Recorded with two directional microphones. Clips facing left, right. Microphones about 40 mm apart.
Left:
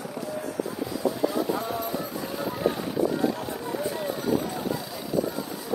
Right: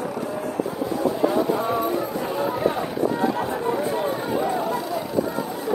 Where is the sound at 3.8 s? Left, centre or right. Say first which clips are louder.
Right 6 dB; right.